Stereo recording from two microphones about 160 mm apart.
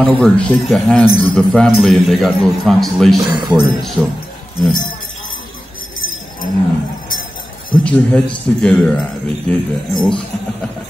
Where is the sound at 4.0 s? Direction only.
10° left (ahead or behind).